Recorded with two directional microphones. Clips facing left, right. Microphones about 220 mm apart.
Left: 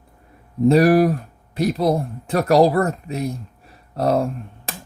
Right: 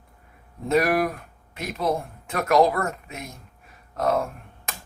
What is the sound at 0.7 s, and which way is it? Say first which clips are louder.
Speech: left 7 dB; 35° left (ahead or behind).